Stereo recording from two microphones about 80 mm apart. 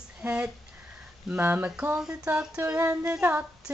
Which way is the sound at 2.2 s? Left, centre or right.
Centre.